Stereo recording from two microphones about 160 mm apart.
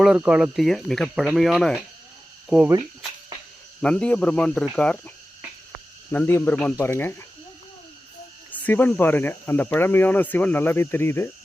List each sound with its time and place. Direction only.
0.0 s speech: 5° right (ahead or behind)
3.8 s speech: 5° left (ahead or behind)
8.5 s speech: 10° left (ahead or behind)